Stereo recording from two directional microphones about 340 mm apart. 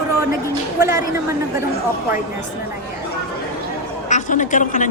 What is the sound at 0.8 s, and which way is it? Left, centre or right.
Speech, centre.